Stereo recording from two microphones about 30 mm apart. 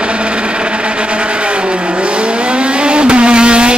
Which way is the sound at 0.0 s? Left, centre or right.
Right.